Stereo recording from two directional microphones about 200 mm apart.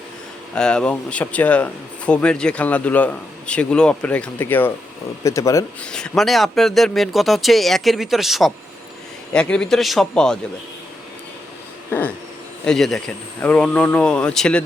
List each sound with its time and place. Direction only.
0.5 s speech: 5° left (ahead or behind)
5.8 s speech: 5° left (ahead or behind)
11.9 s a sound: 10° left (ahead or behind)
12.6 s speech: centre (ahead or behind)